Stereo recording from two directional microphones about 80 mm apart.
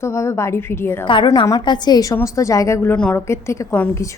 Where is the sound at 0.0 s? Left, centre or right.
Left.